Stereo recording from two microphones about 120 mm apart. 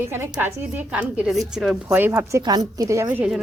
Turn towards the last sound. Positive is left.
turn(degrees=-15)  # may be behind; listen again after turning